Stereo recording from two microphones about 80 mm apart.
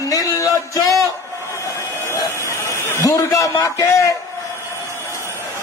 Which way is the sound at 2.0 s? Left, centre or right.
Left.